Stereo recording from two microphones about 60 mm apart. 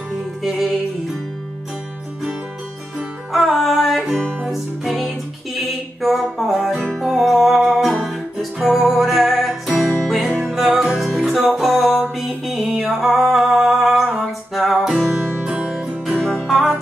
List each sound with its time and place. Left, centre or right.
0.4 s music: centre
3.3 s music: centre
15.0 s music: centre
16.4 s music: centre